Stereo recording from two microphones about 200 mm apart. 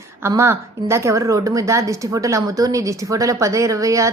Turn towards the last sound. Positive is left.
turn(degrees=-15)  # may be behind; listen again after turning